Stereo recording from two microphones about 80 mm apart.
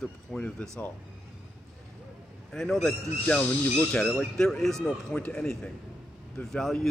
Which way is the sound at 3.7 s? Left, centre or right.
Centre.